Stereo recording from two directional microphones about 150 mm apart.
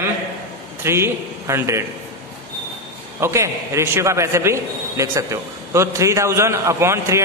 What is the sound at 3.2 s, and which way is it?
A man's voice, 20° right (ahead or behind).